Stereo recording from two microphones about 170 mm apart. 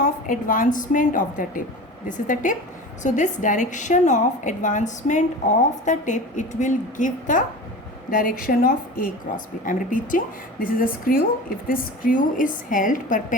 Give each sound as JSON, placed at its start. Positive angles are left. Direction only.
{"t": 0.0, "sound": "a woman's voice", "side_deg": 50}